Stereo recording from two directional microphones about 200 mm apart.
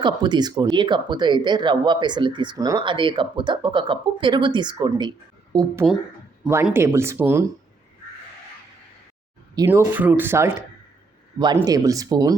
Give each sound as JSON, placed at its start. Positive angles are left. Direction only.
{"t": 0.0, "sound": "speech", "side_deg": -25}
{"t": 6.4, "sound": "speech", "side_deg": -10}
{"t": 9.6, "sound": "speech", "side_deg": -10}